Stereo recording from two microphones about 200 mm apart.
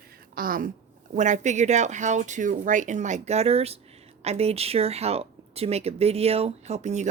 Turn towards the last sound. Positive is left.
turn(degrees=-35)  # may be behind; listen again after turning